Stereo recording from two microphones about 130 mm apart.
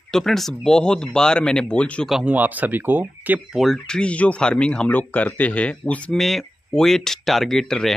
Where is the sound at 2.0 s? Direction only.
10° right (ahead or behind).